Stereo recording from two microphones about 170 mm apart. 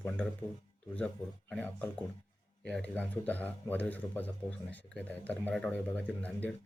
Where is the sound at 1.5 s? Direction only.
10° left (ahead or behind).